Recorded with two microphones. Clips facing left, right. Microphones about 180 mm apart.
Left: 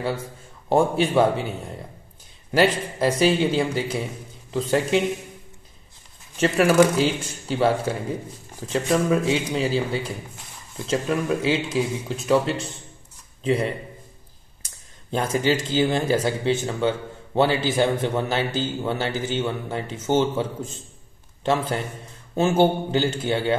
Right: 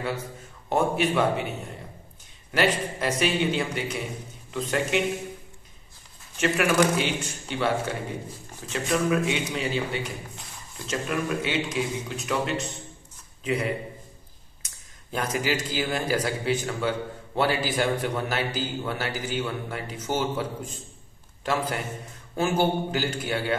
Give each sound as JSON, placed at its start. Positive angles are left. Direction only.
{"t": 0.7, "sound": "a man's voice", "side_deg": 30}
{"t": 2.5, "sound": "a man's voice", "side_deg": 30}
{"t": 6.4, "sound": "a man's voice", "side_deg": 35}